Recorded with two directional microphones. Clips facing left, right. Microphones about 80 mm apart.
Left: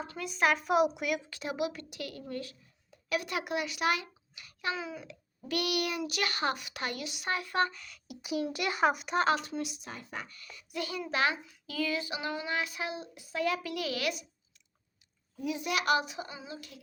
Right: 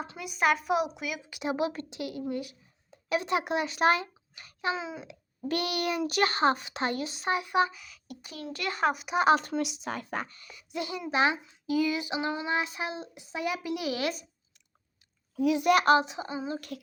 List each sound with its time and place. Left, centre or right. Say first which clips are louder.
0.0 s a child's voice: right 2 dB; centre
1.3 s a child's voice: right 5 dB; centre
1.5 s a child's voice: right 1 dB; right
2.0 s speech: right 6 dB; centre; by 4.5 s right
4.6 s speech: right 3 dB; right
5.5 s a child's voice: right 2 dB; right
7.3 s a child's voice: right 4 dB; centre
9.5 s speech: right 6 dB; right
10.2 s a child's voice: even; right
15.4 s a child's voice: right 9 dB; right
15.8 s a child's voice: right 6 dB; right
16.6 s a sound: right 9 dB; right